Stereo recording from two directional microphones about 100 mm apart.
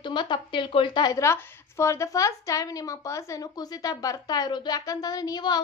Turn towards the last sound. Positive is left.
turn(degrees=45)  # may be behind; listen again after turning